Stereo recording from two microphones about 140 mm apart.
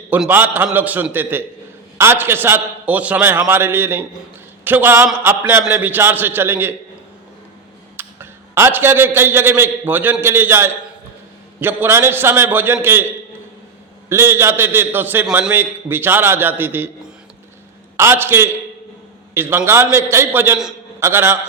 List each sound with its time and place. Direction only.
0.3 s a man's voice: 15° right (ahead or behind)
7.9 s a man's voice: 15° right (ahead or behind)
14.1 s a man's voice: 20° right (ahead or behind)
17.9 s a man's voice: 15° right (ahead or behind)